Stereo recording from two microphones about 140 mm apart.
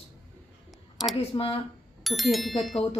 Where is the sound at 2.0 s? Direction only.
Centre (ahead or behind).